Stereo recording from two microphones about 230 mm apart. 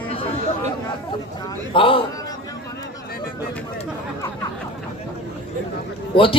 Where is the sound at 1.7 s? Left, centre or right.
Left.